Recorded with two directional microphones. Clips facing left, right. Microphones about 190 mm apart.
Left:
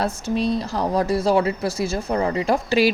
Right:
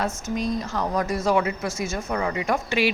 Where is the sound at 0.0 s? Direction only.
35° left (ahead or behind).